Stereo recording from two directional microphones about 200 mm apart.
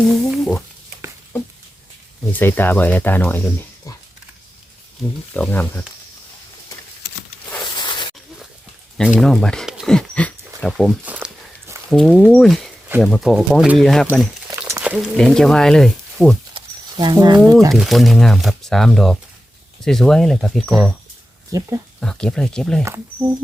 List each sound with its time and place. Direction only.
0.3 s a sound: centre (ahead or behind)
2.3 s speech: 10° left (ahead or behind)
5.3 s speech: 10° left (ahead or behind)
7.6 s a sound: 25° left (ahead or behind)
9.0 s speech: centre (ahead or behind)
14.1 s speech: 10° right (ahead or behind)
16.6 s a sound: 20° right (ahead or behind)
17.5 s speech: 15° right (ahead or behind)
17.7 s speech: centre (ahead or behind)
22.0 s speech: 5° left (ahead or behind)